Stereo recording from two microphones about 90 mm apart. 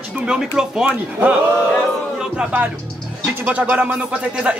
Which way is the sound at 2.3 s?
15° right (ahead or behind).